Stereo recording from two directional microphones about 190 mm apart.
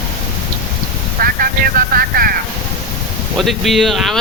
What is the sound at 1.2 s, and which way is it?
Speech, 50° right (ahead or behind).